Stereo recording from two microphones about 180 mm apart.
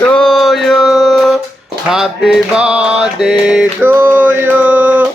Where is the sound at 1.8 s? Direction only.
5° right (ahead or behind).